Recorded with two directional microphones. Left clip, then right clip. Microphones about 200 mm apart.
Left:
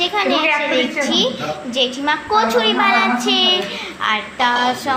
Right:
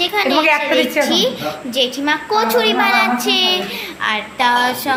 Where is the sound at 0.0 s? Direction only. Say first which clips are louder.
Right 2 dB; 15° right (ahead or behind).